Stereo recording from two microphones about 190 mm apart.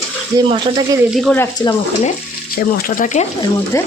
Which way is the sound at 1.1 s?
Centre (ahead or behind).